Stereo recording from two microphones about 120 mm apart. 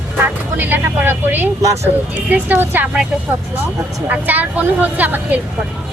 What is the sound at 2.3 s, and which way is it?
Speech, 15° right (ahead or behind).